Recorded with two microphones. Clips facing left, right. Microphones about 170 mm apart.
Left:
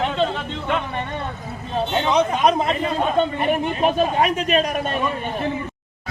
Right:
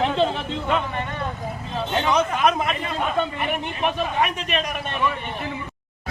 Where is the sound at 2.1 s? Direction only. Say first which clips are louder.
Left 5 dB; 25° left (ahead or behind).